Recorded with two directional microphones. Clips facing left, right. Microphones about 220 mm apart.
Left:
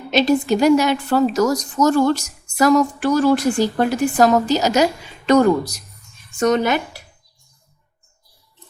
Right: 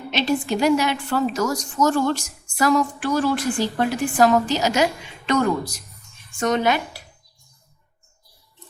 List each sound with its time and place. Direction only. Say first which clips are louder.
0.1 s a woman's voice: left 6 dB; 40° left (ahead or behind)